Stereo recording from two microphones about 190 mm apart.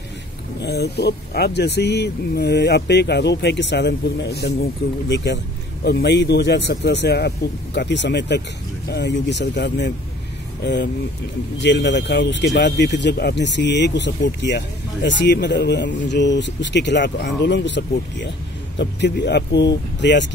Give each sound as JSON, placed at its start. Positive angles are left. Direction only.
{"t": 0.6, "sound": "speech", "side_deg": 60}